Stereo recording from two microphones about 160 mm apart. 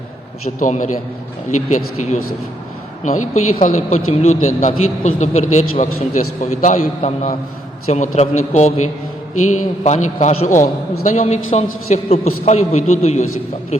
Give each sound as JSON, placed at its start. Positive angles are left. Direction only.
{"t": 0.6, "sound": "a man's voice", "side_deg": 50}